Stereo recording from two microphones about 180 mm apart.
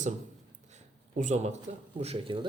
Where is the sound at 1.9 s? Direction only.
30° right (ahead or behind).